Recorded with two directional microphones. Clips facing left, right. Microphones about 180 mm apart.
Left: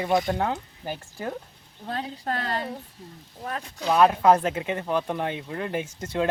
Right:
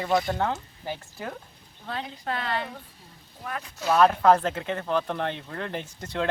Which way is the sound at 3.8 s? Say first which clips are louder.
Left 1 dB; 15° left (ahead or behind).